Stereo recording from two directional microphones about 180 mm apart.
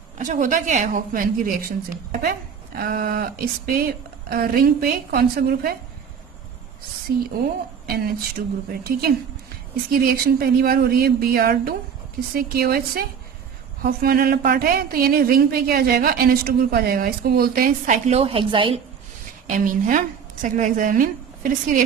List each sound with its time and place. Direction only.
0.2 s a woman's voice: 45° right (ahead or behind)
4.3 s speech: 55° right (ahead or behind)
7.9 s speech: 55° right (ahead or behind); by 18.8 s 30° right (ahead or behind)
19.5 s a woman's voice: 45° right (ahead or behind)